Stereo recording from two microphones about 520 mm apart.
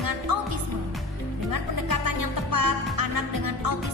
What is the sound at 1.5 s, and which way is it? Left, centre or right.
Music, right.